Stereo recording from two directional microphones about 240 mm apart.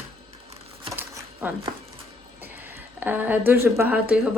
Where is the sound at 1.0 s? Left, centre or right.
Centre.